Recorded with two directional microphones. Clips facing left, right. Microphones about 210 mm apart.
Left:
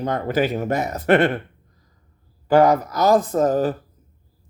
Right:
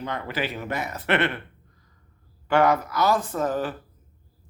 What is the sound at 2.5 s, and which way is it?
Speech, 40° left (ahead or behind).